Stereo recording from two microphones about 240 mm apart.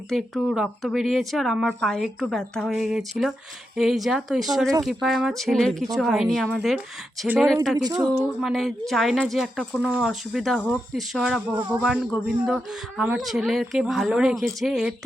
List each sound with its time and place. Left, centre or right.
0.1 s speech: centre
7.8 s a woman's voice: centre
8.4 s speech: centre